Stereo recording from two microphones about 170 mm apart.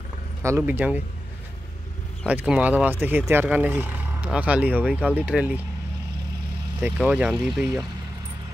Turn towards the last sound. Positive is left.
turn(degrees=0)  # may be behind; listen again after turning